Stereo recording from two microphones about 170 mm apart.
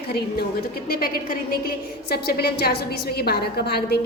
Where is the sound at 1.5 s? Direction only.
65° left (ahead or behind).